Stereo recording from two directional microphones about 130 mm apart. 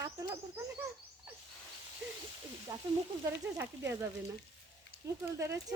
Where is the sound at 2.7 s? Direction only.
25° right (ahead or behind).